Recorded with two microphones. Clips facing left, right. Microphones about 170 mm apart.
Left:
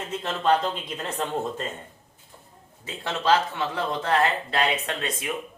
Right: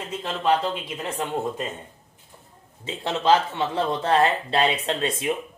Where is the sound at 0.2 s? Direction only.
10° right (ahead or behind).